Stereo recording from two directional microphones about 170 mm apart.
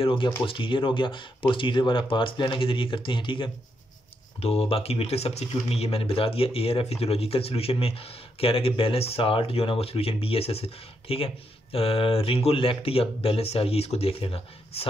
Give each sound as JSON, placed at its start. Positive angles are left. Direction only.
{"t": 0.0, "sound": "speech", "side_deg": 30}